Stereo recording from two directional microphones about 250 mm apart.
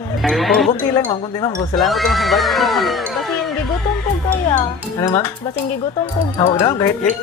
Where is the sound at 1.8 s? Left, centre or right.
Centre.